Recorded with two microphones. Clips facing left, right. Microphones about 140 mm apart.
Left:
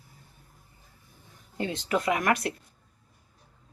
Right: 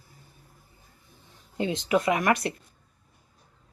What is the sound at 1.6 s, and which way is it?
Dishes, 20° right (ahead or behind).